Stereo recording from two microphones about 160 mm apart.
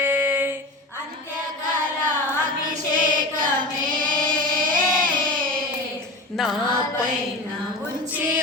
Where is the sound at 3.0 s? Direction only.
60° right (ahead or behind).